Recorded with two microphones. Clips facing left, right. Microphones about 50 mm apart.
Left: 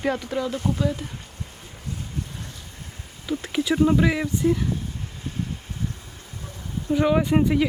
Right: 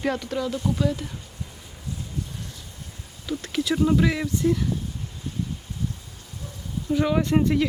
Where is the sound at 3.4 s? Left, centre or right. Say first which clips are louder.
Left 2 dB; centre.